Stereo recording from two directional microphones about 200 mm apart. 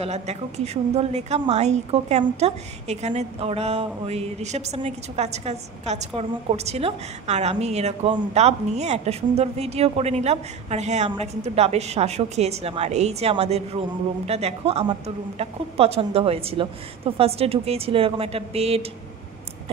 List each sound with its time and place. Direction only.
0.0 s a woman's voice: 35° right (ahead or behind)